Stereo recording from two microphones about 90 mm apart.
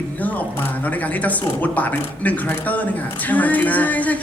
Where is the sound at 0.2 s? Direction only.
15° left (ahead or behind).